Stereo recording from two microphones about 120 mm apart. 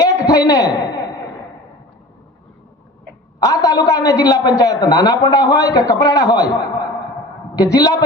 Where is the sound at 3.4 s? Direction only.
30° left (ahead or behind).